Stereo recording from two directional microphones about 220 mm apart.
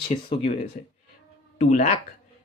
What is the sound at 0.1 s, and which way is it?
Speech, 25° left (ahead or behind).